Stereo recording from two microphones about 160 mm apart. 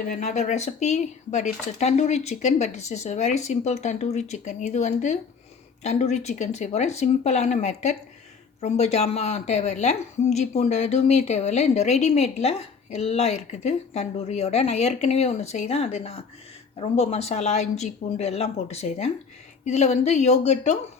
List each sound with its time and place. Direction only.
0.1 s a woman's voice: 45° left (ahead or behind)